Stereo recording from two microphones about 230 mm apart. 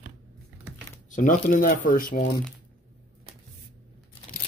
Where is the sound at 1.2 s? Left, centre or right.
Left.